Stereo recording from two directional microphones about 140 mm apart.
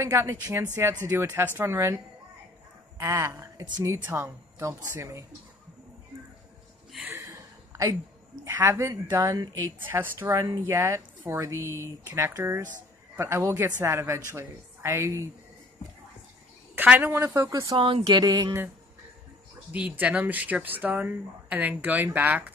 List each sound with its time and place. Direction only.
0.0 s a woman's voice: 15° right (ahead or behind)
3.0 s a woman's voice: 20° right (ahead or behind)
3.9 s a woman's voice: 15° right (ahead or behind)
7.1 s a sound: 20° right (ahead or behind)
8.5 s a woman's voice: 15° right (ahead or behind)
16.7 s speech: 10° right (ahead or behind)
17.7 s speech: 40° right (ahead or behind)
18.0 s a woman's voice: 30° right (ahead or behind)
19.7 s speech: 10° right (ahead or behind)